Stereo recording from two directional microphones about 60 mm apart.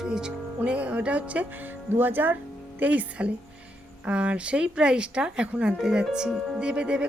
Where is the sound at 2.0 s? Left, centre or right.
Right.